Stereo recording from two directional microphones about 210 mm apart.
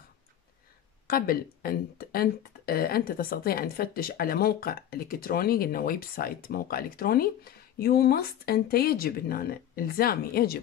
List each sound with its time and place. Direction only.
1.0 s speech: 45° left (ahead or behind)